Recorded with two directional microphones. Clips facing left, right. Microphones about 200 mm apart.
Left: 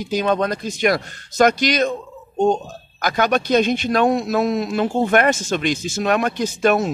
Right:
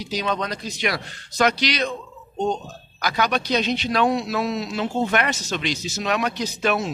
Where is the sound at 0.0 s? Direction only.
50° left (ahead or behind).